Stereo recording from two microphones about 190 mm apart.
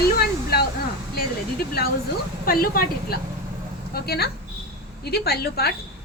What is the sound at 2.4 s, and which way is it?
A woman's voice, 50° left (ahead or behind).